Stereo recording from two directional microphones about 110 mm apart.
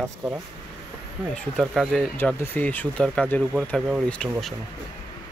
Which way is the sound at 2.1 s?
20° left (ahead or behind).